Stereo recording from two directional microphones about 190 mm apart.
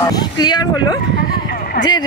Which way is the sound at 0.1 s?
20° left (ahead or behind).